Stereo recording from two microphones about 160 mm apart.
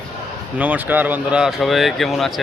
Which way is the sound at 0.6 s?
10° right (ahead or behind).